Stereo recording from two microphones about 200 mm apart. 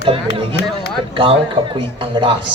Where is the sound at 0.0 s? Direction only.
25° right (ahead or behind).